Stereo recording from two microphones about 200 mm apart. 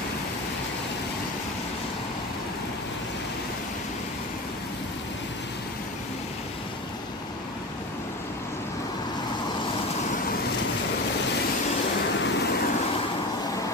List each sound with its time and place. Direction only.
12.2 s vehicle: 60° left (ahead or behind)